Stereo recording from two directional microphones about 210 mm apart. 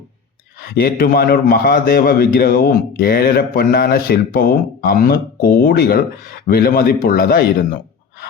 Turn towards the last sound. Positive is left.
turn(degrees=45)  # may be behind; listen again after turning